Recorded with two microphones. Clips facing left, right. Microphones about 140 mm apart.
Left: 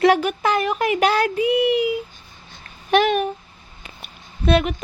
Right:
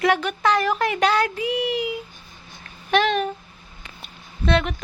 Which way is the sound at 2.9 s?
15° left (ahead or behind).